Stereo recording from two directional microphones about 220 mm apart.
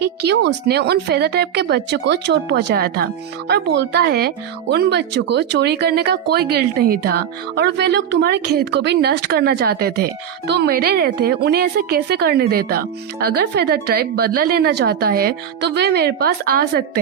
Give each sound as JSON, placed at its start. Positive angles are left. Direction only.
{"t": 0.0, "sound": "speech", "side_deg": -50}